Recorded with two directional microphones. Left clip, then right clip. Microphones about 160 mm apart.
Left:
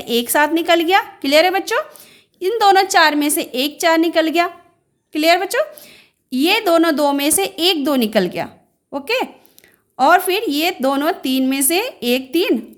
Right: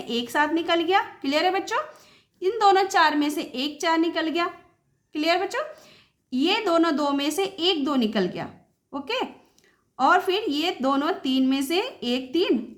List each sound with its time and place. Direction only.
0.0 s a woman's voice: 45° left (ahead or behind)